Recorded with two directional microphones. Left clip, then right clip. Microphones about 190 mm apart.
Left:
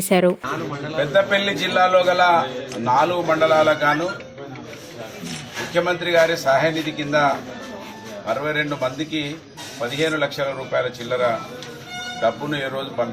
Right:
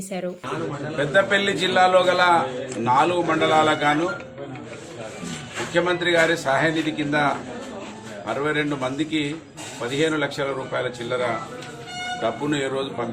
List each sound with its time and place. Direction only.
0.1 s a woman's voice: 50° left (ahead or behind)
0.9 s a man's voice: centre (ahead or behind)
5.7 s a man's voice: centre (ahead or behind)
8.3 s a man's voice: centre (ahead or behind)